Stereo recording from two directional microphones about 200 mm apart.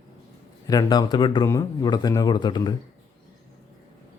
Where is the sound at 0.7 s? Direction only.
20° left (ahead or behind).